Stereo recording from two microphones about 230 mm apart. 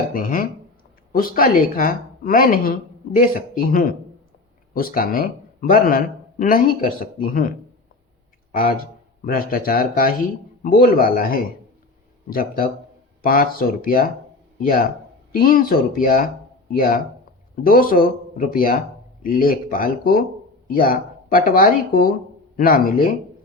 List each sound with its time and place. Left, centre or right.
0.1 s speech: left
8.5 s speech: left